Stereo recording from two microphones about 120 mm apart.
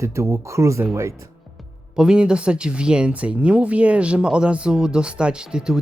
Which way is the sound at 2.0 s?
5° right (ahead or behind).